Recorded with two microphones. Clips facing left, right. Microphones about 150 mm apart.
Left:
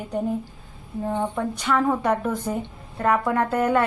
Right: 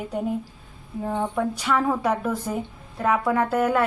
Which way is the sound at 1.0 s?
Centre (ahead or behind).